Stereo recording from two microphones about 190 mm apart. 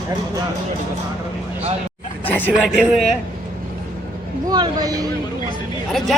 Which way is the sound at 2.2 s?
10° left (ahead or behind).